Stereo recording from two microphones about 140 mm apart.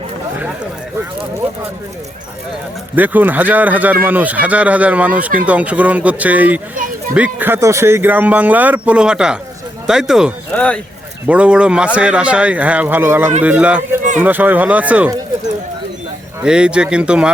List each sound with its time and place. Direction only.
2.9 s speech: 10° right (ahead or behind)
10.5 s speech: 10° left (ahead or behind)
11.3 s speech: 10° right (ahead or behind)
16.4 s speech: 5° right (ahead or behind)